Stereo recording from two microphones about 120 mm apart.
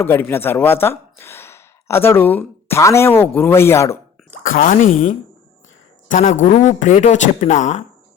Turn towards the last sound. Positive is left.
turn(degrees=90)